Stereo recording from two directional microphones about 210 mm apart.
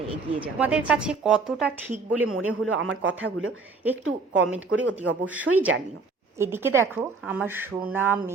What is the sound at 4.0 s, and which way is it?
Speech, 80° right.